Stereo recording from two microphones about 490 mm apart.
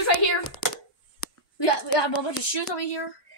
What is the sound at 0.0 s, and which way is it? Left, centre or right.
Speech, left.